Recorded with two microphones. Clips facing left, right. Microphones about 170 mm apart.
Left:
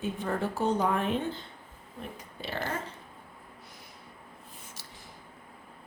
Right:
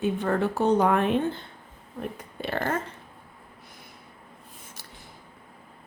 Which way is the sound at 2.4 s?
55° right (ahead or behind).